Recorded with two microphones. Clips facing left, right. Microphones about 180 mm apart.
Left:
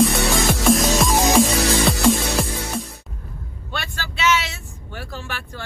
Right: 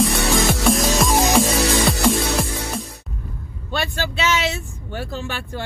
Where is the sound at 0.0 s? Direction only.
Centre (ahead or behind).